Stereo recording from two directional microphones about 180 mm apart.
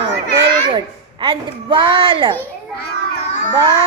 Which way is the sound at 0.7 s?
30° right (ahead or behind).